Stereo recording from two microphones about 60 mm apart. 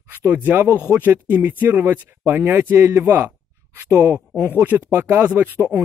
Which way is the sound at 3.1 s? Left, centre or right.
Right.